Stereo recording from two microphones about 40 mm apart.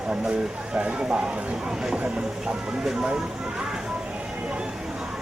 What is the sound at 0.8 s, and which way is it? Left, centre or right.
Speech, right.